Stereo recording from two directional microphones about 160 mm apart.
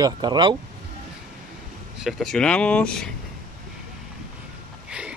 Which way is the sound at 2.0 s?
Centre (ahead or behind).